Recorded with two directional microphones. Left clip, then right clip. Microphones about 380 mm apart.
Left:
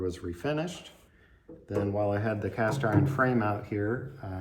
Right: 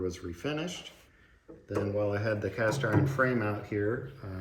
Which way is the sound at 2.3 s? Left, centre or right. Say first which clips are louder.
Even; left.